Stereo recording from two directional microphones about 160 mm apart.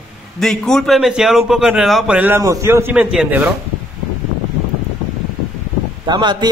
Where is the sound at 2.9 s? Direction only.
5° right (ahead or behind).